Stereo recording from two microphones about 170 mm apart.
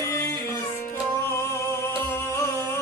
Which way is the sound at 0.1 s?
15° left (ahead or behind).